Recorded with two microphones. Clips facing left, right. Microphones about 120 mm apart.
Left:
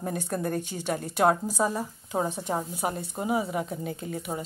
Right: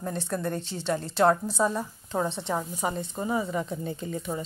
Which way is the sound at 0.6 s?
10° left (ahead or behind).